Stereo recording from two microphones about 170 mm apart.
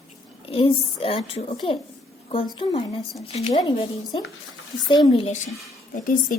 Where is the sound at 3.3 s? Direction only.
35° left (ahead or behind).